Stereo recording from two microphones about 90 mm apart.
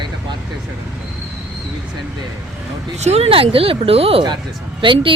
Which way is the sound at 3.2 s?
90° right.